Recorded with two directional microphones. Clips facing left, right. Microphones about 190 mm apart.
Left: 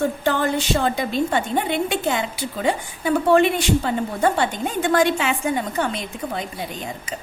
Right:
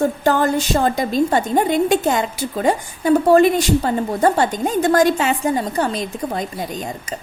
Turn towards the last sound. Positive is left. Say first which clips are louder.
# right 4 dB
turn(degrees=-40)  # may be behind; listen again after turning